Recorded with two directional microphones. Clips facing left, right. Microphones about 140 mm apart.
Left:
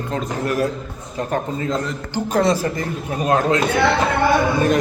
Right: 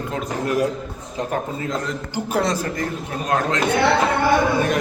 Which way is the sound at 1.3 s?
5° right (ahead or behind).